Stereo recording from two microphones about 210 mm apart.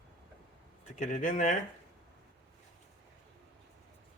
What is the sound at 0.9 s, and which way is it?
Speech, 40° left (ahead or behind).